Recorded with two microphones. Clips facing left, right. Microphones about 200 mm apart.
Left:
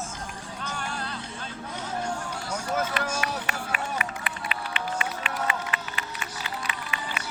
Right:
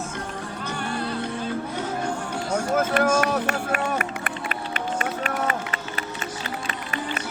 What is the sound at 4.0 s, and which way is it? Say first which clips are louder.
Run: right 4 dB; 45° right (ahead or behind).